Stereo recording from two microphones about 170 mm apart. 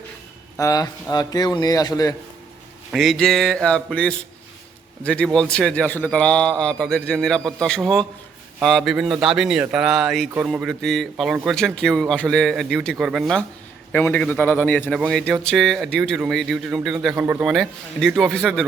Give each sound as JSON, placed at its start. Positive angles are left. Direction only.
{"t": 0.5, "sound": "a man's voice", "side_deg": 20}
{"t": 2.9, "sound": "a man's voice", "side_deg": 0}
{"t": 13.9, "sound": "a man's voice", "side_deg": 10}
{"t": 14.8, "sound": "a man's voice", "side_deg": 0}